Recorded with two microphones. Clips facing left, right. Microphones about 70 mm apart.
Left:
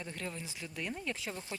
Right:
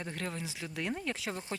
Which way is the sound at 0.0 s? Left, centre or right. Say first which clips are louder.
Right 3 dB; right.